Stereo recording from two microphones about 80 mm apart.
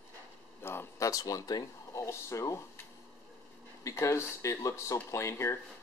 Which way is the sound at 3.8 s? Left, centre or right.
Left.